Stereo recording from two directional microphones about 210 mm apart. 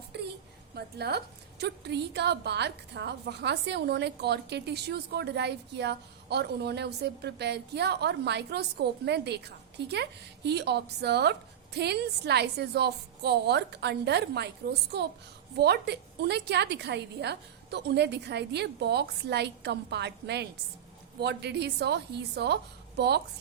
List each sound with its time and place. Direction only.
0.8 s a woman's voice: 50° right (ahead or behind)